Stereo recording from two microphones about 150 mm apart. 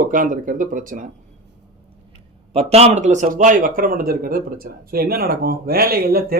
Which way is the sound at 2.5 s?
45° right (ahead or behind).